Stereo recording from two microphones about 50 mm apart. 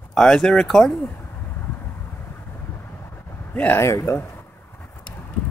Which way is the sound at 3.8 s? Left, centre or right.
Left.